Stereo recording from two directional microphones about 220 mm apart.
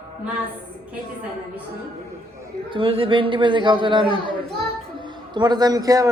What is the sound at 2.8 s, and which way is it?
A man's voice, 25° right (ahead or behind).